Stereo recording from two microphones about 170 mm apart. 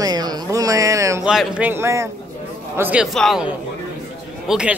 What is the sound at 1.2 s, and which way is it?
A man's voice, 5° right (ahead or behind).